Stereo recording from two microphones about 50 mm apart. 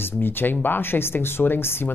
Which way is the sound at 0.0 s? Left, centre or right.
Left.